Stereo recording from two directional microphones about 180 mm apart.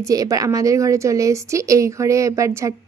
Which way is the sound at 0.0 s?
20° right (ahead or behind).